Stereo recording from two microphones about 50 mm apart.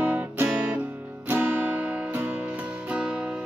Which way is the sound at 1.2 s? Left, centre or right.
Right.